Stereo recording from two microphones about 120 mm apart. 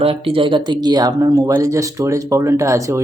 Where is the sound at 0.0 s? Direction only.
50° right (ahead or behind).